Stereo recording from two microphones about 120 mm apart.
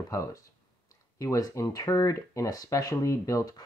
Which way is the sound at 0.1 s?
30° left (ahead or behind).